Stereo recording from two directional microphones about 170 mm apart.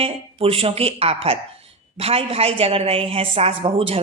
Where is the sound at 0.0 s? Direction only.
35° right (ahead or behind).